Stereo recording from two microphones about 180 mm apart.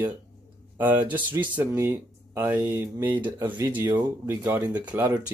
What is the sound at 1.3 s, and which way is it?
Speech, 10° right (ahead or behind).